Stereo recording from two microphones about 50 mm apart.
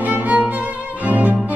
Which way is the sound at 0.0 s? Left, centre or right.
Right.